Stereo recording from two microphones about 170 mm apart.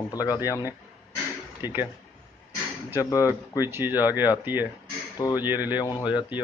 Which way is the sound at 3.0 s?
20° left (ahead or behind).